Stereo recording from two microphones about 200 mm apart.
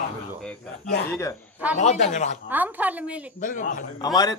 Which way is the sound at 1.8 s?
35° left (ahead or behind).